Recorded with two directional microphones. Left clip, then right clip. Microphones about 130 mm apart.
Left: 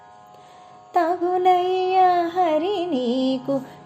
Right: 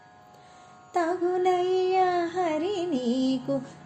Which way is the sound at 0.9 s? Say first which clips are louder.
Left 6 dB; 30° left (ahead or behind).